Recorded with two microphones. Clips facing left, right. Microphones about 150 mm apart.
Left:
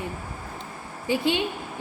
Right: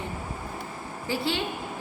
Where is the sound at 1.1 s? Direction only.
15° left (ahead or behind).